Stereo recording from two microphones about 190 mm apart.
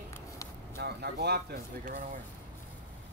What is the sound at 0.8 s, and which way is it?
Speech, 60° right (ahead or behind).